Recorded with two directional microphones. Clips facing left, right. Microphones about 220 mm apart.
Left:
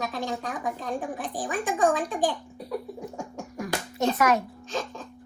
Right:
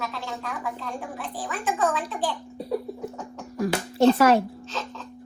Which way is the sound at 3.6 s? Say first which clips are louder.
Right 7 dB; 30° right (ahead or behind).